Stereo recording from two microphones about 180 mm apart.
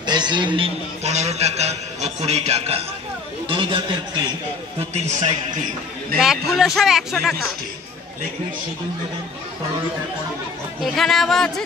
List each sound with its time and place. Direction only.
0.0 s a man's voice: 25° right (ahead or behind)
1.0 s a man's voice: 40° right (ahead or behind)
4.7 s a man's voice: 40° right (ahead or behind)
6.1 s speech: 5° right (ahead or behind)
10.8 s speech: centre (ahead or behind)